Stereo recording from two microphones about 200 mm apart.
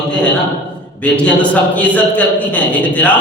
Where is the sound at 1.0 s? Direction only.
5° left (ahead or behind).